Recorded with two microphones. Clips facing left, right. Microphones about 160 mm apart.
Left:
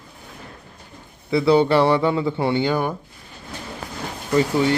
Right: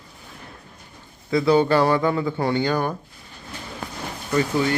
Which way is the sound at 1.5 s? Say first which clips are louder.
Left 2 dB; 25° left (ahead or behind).